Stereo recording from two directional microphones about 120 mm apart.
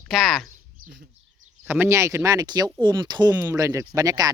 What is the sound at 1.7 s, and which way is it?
Speech, 20° right (ahead or behind).